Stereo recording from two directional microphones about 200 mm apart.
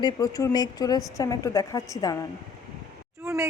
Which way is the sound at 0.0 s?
20° left (ahead or behind).